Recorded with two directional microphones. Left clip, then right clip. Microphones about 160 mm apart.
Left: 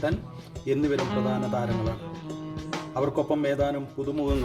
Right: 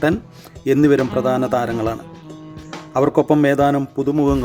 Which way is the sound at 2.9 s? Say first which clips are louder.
Right 11 dB; 70° right (ahead or behind).